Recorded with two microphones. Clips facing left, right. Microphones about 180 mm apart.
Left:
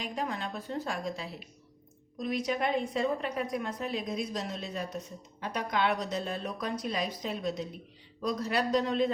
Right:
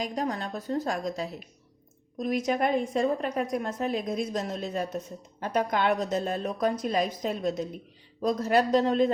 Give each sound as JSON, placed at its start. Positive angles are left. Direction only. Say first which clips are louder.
{"t": 0.0, "sound": "a woman's voice", "louder": "right 4 dB", "side_deg": -40}